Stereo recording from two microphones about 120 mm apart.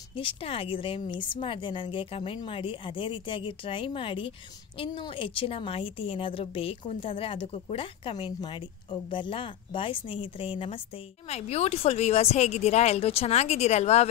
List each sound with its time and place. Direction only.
0.1 s a woman's voice: 50° left (ahead or behind)
11.2 s speech: 60° left (ahead or behind)